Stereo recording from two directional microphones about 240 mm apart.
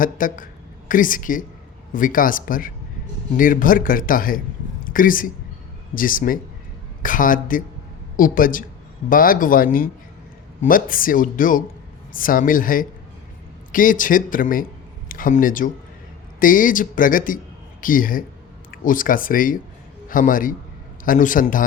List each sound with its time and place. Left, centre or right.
0.0 s a man's voice: left